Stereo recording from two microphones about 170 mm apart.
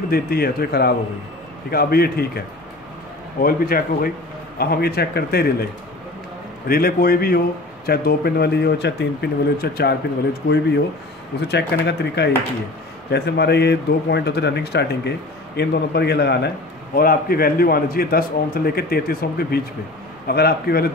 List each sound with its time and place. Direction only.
0.1 s a man's voice: 65° left (ahead or behind)
6.7 s a man's voice: 60° left (ahead or behind)
11.4 s a man's voice: 80° left
16.9 s a man's voice: 60° left (ahead or behind)